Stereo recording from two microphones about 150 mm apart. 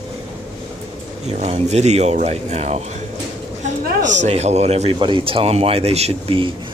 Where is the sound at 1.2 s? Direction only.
45° right (ahead or behind).